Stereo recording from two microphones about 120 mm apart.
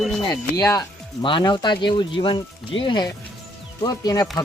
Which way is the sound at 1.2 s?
45° left (ahead or behind).